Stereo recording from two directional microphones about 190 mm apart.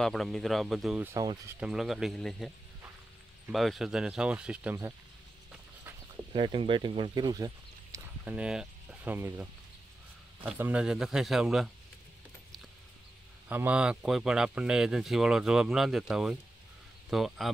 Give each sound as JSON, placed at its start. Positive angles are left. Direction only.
{"t": 0.0, "sound": "speech", "side_deg": 0}
{"t": 1.1, "sound": "speech", "side_deg": -20}
{"t": 1.6, "sound": "speech", "side_deg": 0}
{"t": 6.3, "sound": "speech", "side_deg": -25}
{"t": 13.5, "sound": "speech", "side_deg": -10}